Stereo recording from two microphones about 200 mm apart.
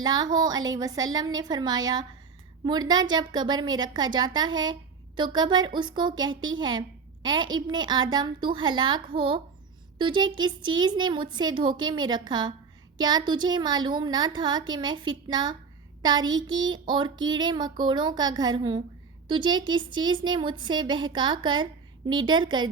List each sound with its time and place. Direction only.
0.0 s a woman's voice: 20° right (ahead or behind)